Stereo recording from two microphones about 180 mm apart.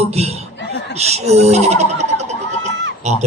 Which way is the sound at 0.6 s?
70° left (ahead or behind).